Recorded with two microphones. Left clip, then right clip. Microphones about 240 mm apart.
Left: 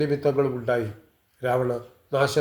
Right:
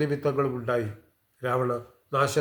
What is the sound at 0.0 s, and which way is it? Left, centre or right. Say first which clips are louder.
Speech: left 3 dB; centre.